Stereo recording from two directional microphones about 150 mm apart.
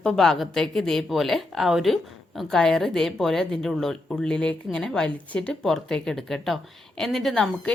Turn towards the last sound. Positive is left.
turn(degrees=0)  # may be behind; listen again after turning